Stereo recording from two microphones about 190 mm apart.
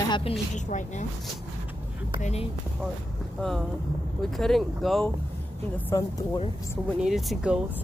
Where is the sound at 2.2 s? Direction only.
35° left (ahead or behind).